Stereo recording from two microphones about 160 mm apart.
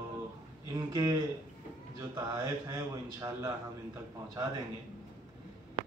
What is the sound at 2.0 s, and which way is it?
Speech, 20° right (ahead or behind).